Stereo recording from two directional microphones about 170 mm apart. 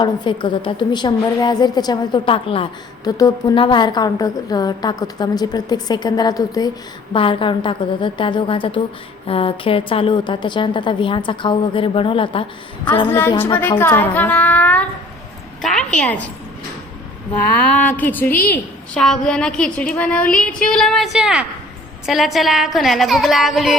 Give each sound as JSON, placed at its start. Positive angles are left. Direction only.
{"t": 0.0, "sound": "a woman's voice", "side_deg": 30}
{"t": 13.1, "sound": "a woman's voice", "side_deg": 15}
{"t": 17.5, "sound": "a woman's voice", "side_deg": 10}